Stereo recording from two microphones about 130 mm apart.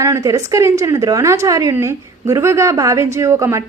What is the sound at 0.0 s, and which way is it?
A woman's voice, 25° right (ahead or behind).